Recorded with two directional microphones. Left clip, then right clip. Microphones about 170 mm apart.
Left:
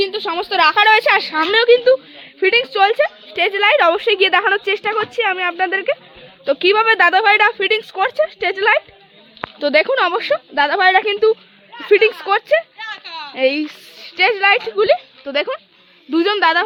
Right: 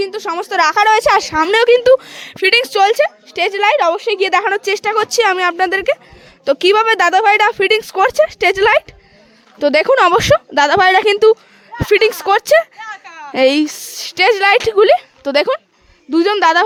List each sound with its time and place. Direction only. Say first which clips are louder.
0.1 s speech: right 1 dB; 25° right (ahead or behind)
3.8 s a woman's voice: left 1 dB; 10° right (ahead or behind)
4.2 s a woman's voice: even; 20° right (ahead or behind)
4.7 s speech: right 3 dB; 40° right (ahead or behind)
5.1 s speech: right 5 dB; 60° right (ahead or behind); by 13.1 s 90° right
13.2 s a woman's voice: right 5 dB; 55° right (ahead or behind)
16.1 s speech: right 3 dB; 35° right (ahead or behind)